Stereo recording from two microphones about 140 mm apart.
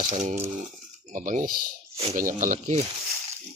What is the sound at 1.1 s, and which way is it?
Speech, 70° right (ahead or behind).